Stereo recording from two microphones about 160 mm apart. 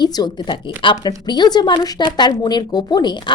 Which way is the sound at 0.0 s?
25° left (ahead or behind).